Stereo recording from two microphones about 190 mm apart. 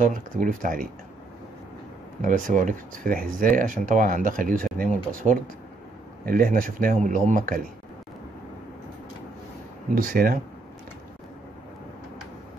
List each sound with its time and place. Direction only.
0.0 s speech: 45° right (ahead or behind)
2.2 s speech: 45° right (ahead or behind)
10.0 s speech: 50° right (ahead or behind)